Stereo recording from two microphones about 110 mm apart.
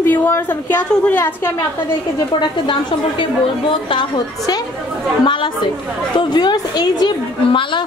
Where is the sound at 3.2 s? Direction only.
50° left (ahead or behind).